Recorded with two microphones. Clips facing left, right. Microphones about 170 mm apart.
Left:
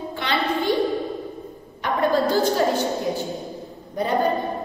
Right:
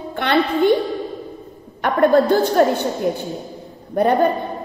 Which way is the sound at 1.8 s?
60° right (ahead or behind).